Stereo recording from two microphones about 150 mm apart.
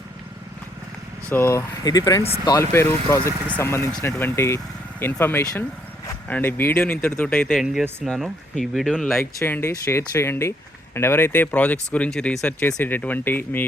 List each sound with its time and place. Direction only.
1.3 s speech: 15° left (ahead or behind)
7.5 s speech: centre (ahead or behind)
9.1 s speech: 15° left (ahead or behind)